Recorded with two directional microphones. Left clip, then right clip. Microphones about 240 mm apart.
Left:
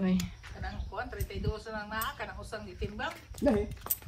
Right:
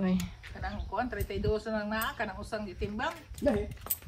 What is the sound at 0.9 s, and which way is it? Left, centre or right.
Speech, right.